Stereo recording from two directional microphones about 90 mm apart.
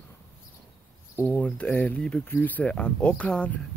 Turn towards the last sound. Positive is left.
turn(degrees=10)  # may be behind; listen again after turning